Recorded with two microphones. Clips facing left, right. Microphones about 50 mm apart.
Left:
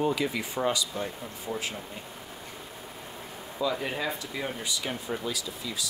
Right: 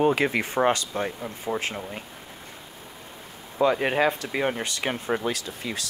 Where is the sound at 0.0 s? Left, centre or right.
Right.